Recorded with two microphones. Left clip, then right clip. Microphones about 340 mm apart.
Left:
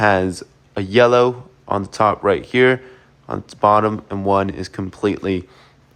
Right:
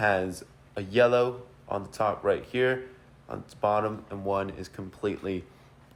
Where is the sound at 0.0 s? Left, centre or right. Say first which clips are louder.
Left 10 dB; left.